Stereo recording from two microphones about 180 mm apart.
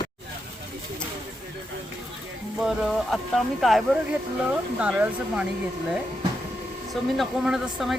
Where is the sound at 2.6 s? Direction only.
Centre (ahead or behind).